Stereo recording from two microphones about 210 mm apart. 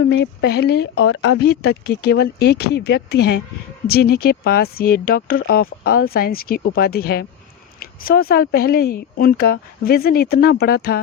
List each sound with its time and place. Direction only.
0.4 s speech: 50° left (ahead or behind)